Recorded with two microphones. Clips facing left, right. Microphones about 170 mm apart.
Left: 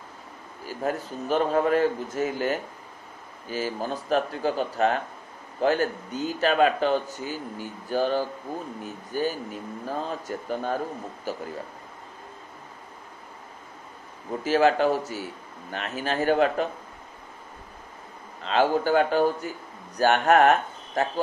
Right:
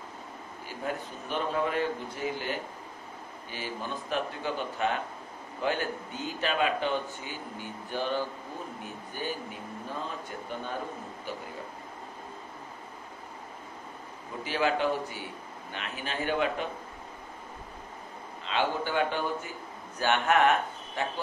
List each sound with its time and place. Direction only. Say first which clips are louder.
0.7 s a man's voice: left 6 dB; 40° left (ahead or behind)
14.4 s speech: left 7 dB; 40° left (ahead or behind)
18.4 s speech: left 7 dB; 40° left (ahead or behind)